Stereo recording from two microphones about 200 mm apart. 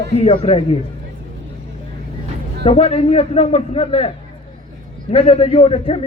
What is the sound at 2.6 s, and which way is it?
A man's voice, 30° left (ahead or behind).